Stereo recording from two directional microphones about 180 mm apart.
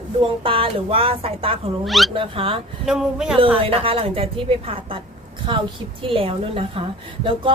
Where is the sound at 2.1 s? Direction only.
30° right (ahead or behind).